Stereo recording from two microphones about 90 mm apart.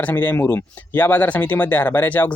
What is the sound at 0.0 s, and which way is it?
Speech, 20° left (ahead or behind).